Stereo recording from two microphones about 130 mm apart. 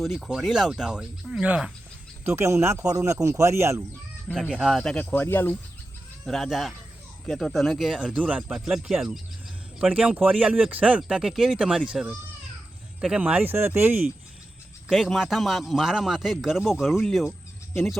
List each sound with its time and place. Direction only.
0.0 s speech: centre (ahead or behind)
2.2 s speech: 20° right (ahead or behind)
4.4 s speech: 5° right (ahead or behind)
4.7 s speech: 5° left (ahead or behind)
6.2 s speech: centre (ahead or behind); by 14.0 s 15° right (ahead or behind)
14.8 s speech: centre (ahead or behind)